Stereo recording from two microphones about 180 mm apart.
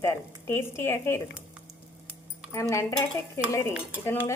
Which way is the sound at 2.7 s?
15° left (ahead or behind).